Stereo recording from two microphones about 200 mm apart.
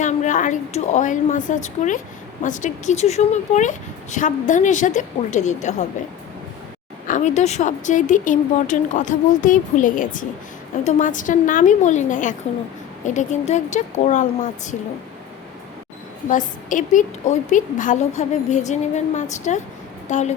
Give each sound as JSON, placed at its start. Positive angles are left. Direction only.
{"t": 0.0, "sound": "speech", "side_deg": 40}
{"t": 7.1, "sound": "speech", "side_deg": 35}
{"t": 16.3, "sound": "speech", "side_deg": 40}